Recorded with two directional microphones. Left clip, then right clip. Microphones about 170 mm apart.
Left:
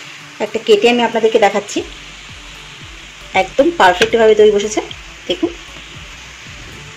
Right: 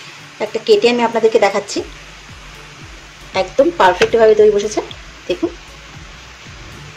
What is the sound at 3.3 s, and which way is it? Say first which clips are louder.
Speech: left 1 dB; 25° left (ahead or behind).